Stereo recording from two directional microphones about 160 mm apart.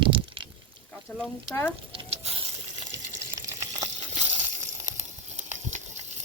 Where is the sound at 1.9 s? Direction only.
35° right (ahead or behind).